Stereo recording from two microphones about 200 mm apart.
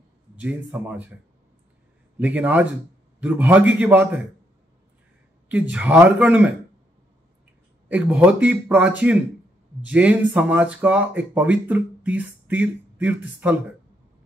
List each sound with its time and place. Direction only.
0.4 s speech: 5° right (ahead or behind)
2.1 s speech: 5° right (ahead or behind)
5.5 s speech: 5° right (ahead or behind)
7.9 s speech: 5° right (ahead or behind)